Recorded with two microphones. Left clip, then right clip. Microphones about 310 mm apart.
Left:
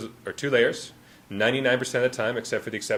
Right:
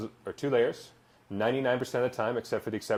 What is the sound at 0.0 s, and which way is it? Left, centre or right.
Speech, centre.